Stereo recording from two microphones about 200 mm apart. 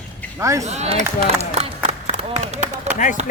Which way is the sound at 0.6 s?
35° right (ahead or behind).